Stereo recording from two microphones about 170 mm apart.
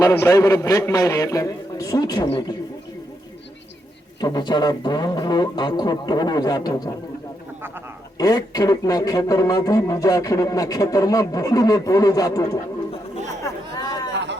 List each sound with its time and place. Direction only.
0.0 s a man's voice: 15° left (ahead or behind); by 2.6 s 30° left (ahead or behind)
4.2 s a man's voice: 25° left (ahead or behind)
8.2 s a man's voice: 25° left (ahead or behind)
14.1 s chatter: 90° right